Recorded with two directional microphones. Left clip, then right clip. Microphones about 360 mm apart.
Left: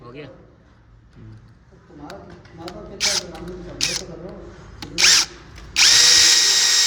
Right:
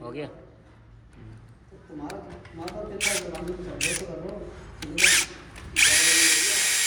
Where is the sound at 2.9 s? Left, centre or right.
Left.